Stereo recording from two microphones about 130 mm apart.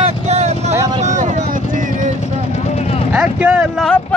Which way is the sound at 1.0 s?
65° right (ahead or behind).